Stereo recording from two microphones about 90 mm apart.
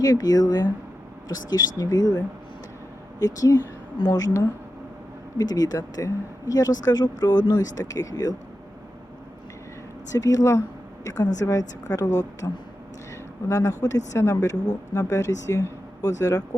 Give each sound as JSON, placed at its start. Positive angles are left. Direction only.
{"t": 0.0, "sound": "a woman's voice", "side_deg": 45}
{"t": 10.1, "sound": "a woman's voice", "side_deg": 40}